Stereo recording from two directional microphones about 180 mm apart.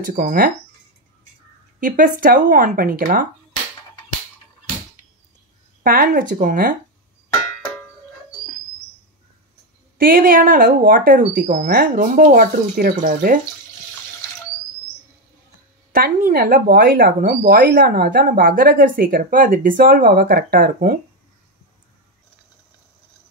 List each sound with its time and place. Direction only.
0.0 s speech: 50° right (ahead or behind)
1.8 s speech: 50° right (ahead or behind)
5.9 s speech: 50° right (ahead or behind)
9.9 s speech: 55° right (ahead or behind)
15.9 s speech: 50° right (ahead or behind)